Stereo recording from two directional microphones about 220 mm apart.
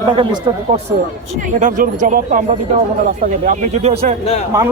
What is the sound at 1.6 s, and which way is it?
Speech, 35° right (ahead or behind).